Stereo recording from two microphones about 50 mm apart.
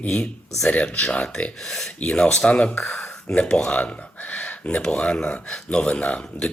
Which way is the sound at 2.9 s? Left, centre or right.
Centre.